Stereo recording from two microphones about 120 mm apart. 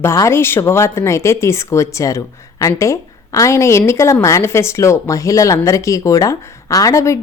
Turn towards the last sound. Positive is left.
turn(degrees=25)  # may be behind; listen again after turning